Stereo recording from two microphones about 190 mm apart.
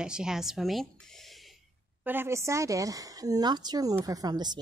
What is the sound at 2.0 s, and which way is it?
A woman's voice, 10° right (ahead or behind).